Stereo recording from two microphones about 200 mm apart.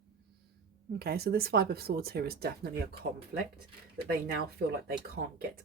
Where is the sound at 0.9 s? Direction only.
50° right (ahead or behind).